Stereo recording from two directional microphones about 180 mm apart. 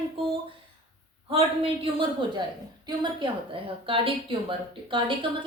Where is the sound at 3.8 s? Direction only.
30° right (ahead or behind).